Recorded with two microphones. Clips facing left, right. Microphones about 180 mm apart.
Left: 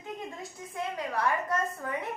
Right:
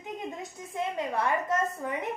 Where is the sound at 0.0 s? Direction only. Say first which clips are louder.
Right 2 dB; 20° right (ahead or behind).